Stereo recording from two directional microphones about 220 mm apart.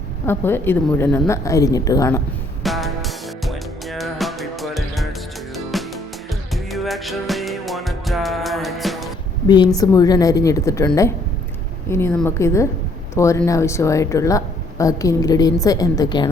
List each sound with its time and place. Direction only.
0.3 s speech: 10° left (ahead or behind)
2.6 s music: centre (ahead or behind)
9.5 s speech: 20° left (ahead or behind)